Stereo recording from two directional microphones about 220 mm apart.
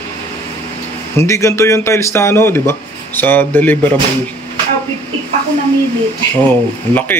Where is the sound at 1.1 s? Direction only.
15° left (ahead or behind).